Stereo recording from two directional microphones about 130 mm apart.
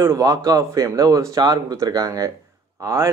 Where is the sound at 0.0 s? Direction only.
25° right (ahead or behind).